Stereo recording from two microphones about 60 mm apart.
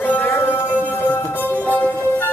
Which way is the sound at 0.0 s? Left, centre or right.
Left.